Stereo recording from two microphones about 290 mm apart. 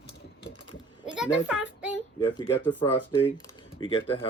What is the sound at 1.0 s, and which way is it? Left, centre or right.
Speech, centre.